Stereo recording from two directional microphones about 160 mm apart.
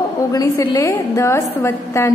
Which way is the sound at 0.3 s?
20° left (ahead or behind).